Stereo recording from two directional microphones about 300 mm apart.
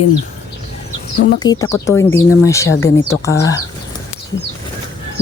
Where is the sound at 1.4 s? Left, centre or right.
Centre.